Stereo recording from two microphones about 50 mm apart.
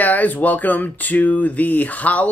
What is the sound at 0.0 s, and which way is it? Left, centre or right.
Speech, left.